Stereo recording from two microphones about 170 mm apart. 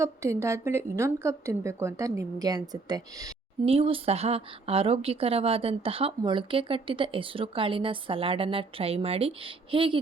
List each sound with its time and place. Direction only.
0.0 s a woman's voice: 15° right (ahead or behind)
3.7 s a woman's voice: 35° right (ahead or behind)